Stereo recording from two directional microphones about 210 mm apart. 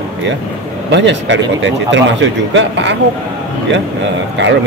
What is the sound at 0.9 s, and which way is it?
Speech, 60° right (ahead or behind).